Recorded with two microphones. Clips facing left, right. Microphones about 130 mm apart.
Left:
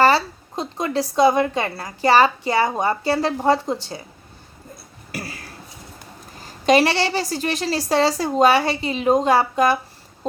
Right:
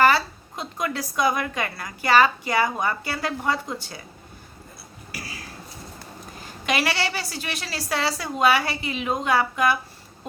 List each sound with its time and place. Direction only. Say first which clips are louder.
0.0 s a woman's voice: left 3 dB; 30° left (ahead or behind)
6.7 s a woman's voice: left 8 dB; 35° left (ahead or behind)